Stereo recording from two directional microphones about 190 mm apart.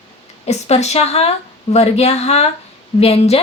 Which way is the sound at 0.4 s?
35° left (ahead or behind).